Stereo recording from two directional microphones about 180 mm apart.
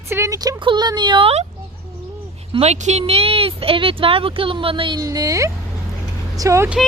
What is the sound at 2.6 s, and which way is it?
Speech, 35° right (ahead or behind).